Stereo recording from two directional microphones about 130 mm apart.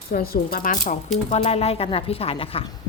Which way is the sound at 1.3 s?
55° left (ahead or behind).